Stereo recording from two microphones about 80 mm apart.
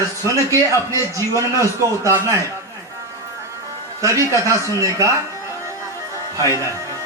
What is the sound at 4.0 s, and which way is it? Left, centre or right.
Music, right.